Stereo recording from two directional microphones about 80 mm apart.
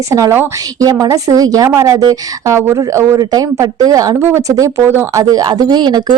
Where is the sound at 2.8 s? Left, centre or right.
Right.